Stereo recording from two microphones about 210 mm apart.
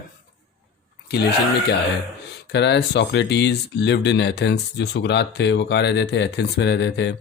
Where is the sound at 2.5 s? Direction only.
55° left (ahead or behind).